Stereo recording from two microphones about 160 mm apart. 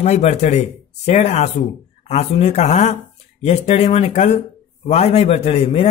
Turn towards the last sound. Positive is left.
turn(degrees=40)  # may be behind; listen again after turning